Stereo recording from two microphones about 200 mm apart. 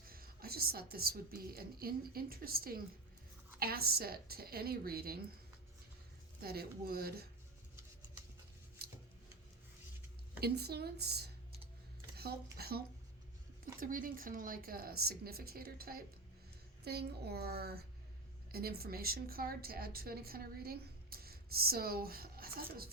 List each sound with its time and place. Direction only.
0.0 s a woman's voice: 50° right (ahead or behind)
6.4 s a woman's voice: 50° right (ahead or behind)
8.8 s scissors: 50° right (ahead or behind)
10.4 s a woman's voice: 55° right (ahead or behind)